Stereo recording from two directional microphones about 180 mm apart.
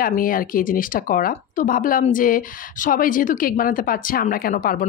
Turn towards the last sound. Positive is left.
turn(degrees=50)  # may be behind; listen again after turning